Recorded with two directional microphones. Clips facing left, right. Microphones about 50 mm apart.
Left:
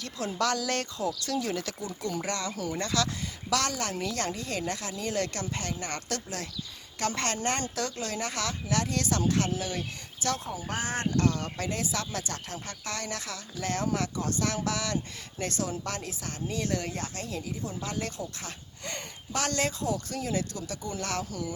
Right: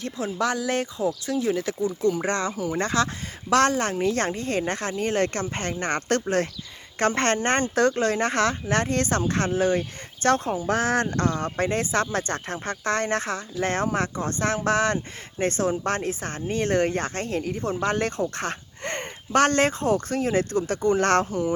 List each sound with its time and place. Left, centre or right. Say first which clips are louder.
0.3 s speech: right 3 dB; centre
2.2 s speech: right 7 dB; right
2.5 s speech: right 5 dB; centre
2.7 s speech: right 6 dB; right
10.7 s speech: right 7 dB; right
11.3 s speech: right 7 dB; right
21.2 s speech: right 10 dB; right